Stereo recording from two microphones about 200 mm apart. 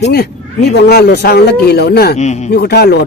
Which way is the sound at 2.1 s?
35° left (ahead or behind).